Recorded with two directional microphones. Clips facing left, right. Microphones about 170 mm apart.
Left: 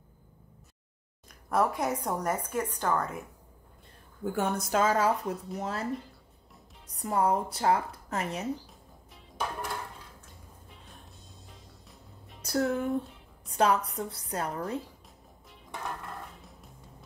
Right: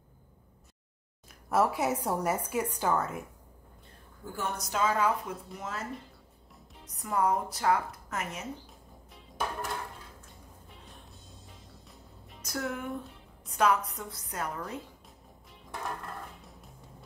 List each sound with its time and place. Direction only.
1.5 s a woman's voice: 5° right (ahead or behind)
4.2 s a woman's voice: 55° left (ahead or behind); by 5.9 s 35° left (ahead or behind)
7.0 s a woman's voice: 30° left (ahead or behind)
8.6 s music: centre (ahead or behind)
10.9 s music: centre (ahead or behind)
12.4 s a woman's voice: 35° left (ahead or behind)
16.3 s music: centre (ahead or behind)